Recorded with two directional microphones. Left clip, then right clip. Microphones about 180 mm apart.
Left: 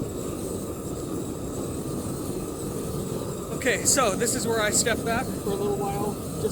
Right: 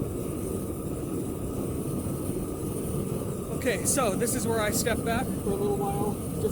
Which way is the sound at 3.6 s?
20° left (ahead or behind).